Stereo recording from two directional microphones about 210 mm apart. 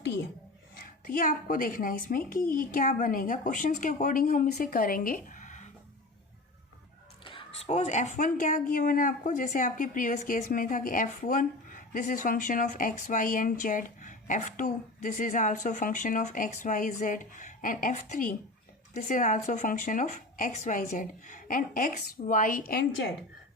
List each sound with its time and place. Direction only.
0.8 s speech: 40° left (ahead or behind)
7.3 s speech: 25° left (ahead or behind); by 22.9 s 45° left (ahead or behind)